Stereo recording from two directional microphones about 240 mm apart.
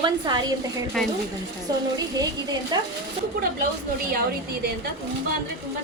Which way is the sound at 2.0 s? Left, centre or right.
Centre.